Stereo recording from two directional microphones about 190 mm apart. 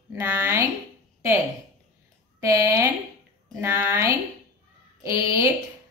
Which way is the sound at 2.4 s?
15° right (ahead or behind).